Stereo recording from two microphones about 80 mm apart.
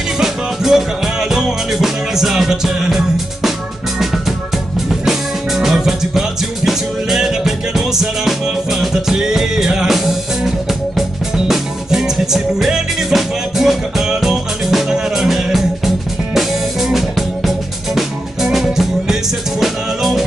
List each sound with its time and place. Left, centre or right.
0.2 s music: centre
4.7 s music: centre
16.9 s music: centre